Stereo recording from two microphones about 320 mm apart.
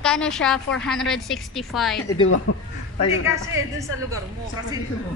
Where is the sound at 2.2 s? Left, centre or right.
Left.